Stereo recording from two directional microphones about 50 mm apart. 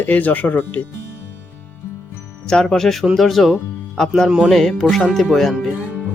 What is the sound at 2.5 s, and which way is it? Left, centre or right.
Speech, centre.